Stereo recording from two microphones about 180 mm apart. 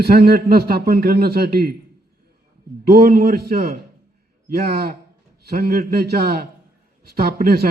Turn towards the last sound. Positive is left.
turn(degrees=-55)  # may be behind; listen again after turning